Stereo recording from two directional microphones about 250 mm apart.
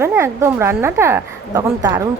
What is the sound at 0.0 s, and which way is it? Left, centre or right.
A woman's voice, centre.